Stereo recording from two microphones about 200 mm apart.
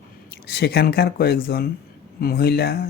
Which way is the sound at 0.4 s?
55° left (ahead or behind).